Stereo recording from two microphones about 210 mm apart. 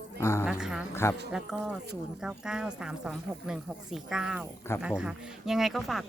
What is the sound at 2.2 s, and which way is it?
Speech, 5° right (ahead or behind).